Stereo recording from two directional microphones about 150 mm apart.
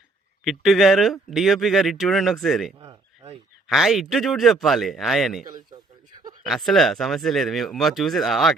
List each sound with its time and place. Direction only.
0.4 s speech: centre (ahead or behind)
2.7 s a sound: 30° right (ahead or behind)
3.7 s speech: centre (ahead or behind)